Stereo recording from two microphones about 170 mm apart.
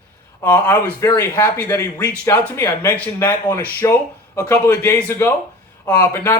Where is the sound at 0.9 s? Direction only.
15° left (ahead or behind).